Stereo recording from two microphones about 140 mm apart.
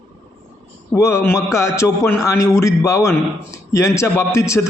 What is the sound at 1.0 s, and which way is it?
A man's voice, 20° left (ahead or behind).